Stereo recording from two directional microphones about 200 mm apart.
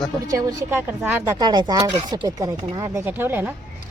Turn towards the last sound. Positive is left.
turn(degrees=-10)  # may be behind; listen again after turning